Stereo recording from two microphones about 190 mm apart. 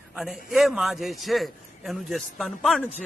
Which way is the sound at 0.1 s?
Centre (ahead or behind).